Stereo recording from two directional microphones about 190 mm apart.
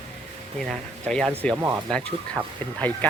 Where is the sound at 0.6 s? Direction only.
5° left (ahead or behind).